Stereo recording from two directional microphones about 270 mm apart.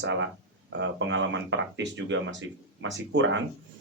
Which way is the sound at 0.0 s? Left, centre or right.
Right.